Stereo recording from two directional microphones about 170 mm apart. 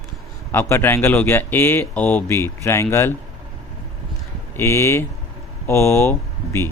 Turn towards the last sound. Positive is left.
turn(degrees=15)  # may be behind; listen again after turning